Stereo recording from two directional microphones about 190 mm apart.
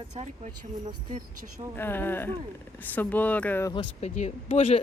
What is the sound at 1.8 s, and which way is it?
Speech, 10° left (ahead or behind).